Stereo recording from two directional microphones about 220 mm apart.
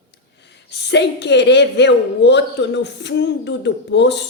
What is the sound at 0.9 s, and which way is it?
A woman's voice, 50° left (ahead or behind).